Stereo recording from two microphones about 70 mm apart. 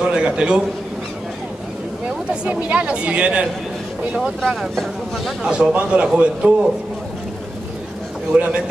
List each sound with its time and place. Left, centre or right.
0.0 s a sound: centre
2.4 s speech: centre
4.4 s speech: centre
5.5 s speech: centre
8.3 s speech: centre